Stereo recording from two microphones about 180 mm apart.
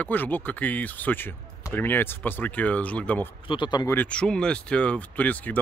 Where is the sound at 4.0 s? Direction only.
5° left (ahead or behind).